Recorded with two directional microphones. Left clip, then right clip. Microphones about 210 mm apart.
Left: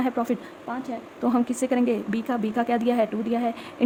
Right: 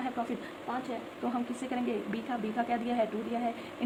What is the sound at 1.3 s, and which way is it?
Speech, 50° left (ahead or behind).